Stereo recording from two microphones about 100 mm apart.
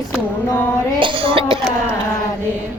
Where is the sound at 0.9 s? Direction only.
60° right (ahead or behind).